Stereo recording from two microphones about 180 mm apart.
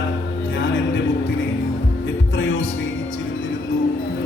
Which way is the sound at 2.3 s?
90° left.